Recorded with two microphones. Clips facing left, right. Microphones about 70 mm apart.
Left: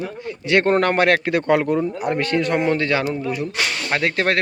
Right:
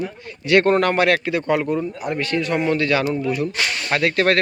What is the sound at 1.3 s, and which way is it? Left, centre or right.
Speech, left.